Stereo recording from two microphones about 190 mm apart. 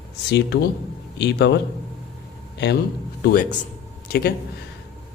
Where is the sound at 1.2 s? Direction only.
65° left (ahead or behind).